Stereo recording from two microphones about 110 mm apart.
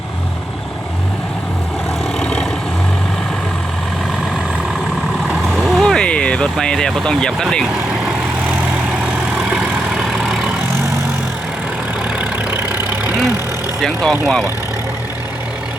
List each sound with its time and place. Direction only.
2.1 s vehicle: 5° left (ahead or behind)
5.5 s vehicle: centre (ahead or behind)
9.5 s vehicle: 5° right (ahead or behind)
12.2 s vehicle: 15° right (ahead or behind)
13.8 s speech: 5° left (ahead or behind)